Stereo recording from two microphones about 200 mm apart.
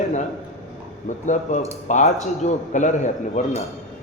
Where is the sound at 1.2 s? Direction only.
40° left (ahead or behind).